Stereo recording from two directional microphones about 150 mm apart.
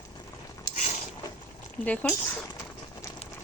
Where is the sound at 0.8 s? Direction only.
55° left (ahead or behind).